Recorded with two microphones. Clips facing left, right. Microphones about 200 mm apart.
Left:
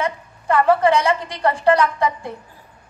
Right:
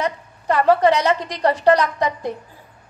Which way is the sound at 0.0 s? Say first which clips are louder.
Even; 35° right (ahead or behind).